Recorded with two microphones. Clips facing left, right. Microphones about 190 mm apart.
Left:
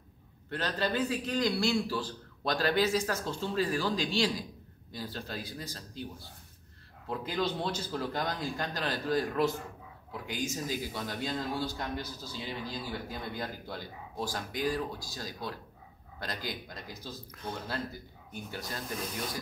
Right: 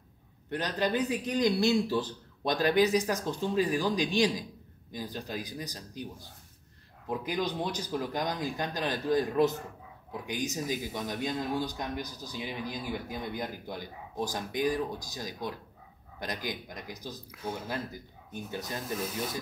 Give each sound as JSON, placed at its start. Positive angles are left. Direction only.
{"t": 0.5, "sound": "a man's voice", "side_deg": -15}
{"t": 19.0, "sound": "speech", "side_deg": -5}